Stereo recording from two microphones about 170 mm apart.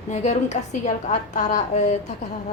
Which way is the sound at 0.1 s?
40° left (ahead or behind).